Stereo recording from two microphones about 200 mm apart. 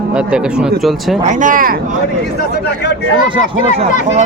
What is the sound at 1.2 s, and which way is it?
Speech, 40° right (ahead or behind).